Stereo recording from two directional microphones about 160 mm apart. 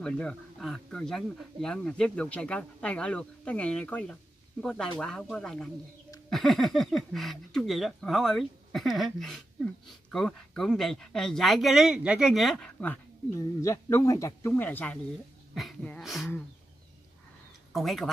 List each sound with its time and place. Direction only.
0.0 s speech: 5° left (ahead or behind)
13.6 s speech: 20° left (ahead or behind); by 16.3 s centre (ahead or behind)
17.7 s speech: centre (ahead or behind)